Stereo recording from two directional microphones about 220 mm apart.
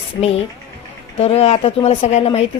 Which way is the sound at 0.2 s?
25° left (ahead or behind).